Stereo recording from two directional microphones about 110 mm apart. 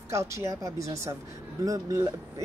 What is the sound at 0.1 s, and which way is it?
Speech, 25° right (ahead or behind).